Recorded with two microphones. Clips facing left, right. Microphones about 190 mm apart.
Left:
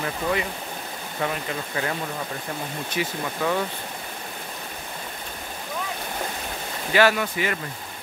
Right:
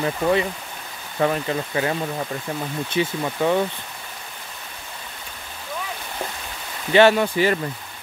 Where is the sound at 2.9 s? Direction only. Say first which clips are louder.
Right 5 dB; 25° right (ahead or behind).